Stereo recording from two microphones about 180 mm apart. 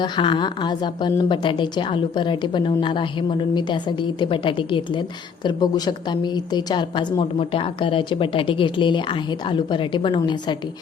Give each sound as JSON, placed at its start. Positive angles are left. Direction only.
{"t": 0.0, "sound": "a woman's voice", "side_deg": 25}